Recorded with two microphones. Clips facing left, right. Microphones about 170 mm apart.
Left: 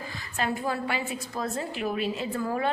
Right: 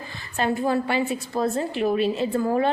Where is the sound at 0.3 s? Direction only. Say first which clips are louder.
Right 6 dB; 30° right (ahead or behind).